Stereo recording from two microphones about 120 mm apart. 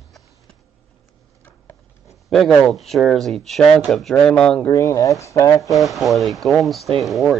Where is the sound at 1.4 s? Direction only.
20° left (ahead or behind).